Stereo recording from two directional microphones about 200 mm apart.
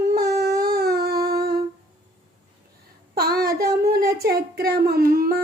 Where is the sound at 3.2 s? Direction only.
50° right (ahead or behind).